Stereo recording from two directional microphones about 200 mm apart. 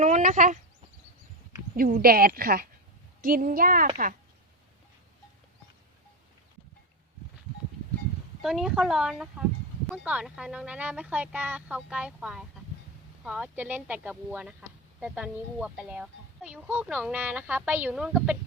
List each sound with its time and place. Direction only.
0.0 s speech: 40° right (ahead or behind)
1.7 s speech: 45° right (ahead or behind)
8.4 s speech: centre (ahead or behind)